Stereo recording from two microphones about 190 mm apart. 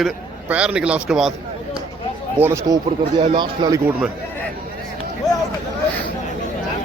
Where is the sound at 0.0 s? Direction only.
5° right (ahead or behind).